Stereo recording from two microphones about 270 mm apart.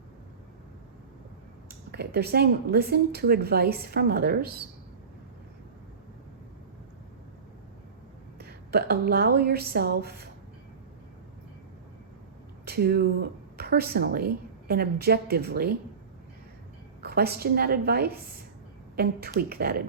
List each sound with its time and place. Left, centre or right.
1.6 s speech: right
8.4 s speech: right
12.6 s speech: right
17.0 s speech: right